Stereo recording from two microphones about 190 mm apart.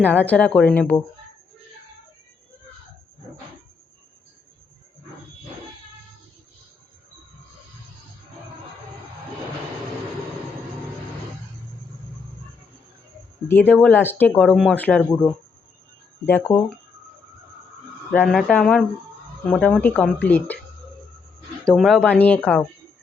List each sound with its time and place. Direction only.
0.0 s speech: 10° left (ahead or behind)
13.5 s speech: 10° left (ahead or behind)
18.1 s speech: 5° left (ahead or behind)
21.7 s speech: centre (ahead or behind)